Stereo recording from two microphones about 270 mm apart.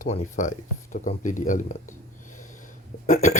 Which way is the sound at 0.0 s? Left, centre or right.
Left.